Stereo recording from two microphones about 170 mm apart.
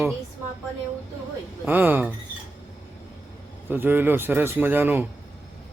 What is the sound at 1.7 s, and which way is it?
Speech, 10° right (ahead or behind).